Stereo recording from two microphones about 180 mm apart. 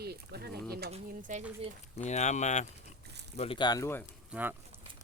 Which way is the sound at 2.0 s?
40° left (ahead or behind).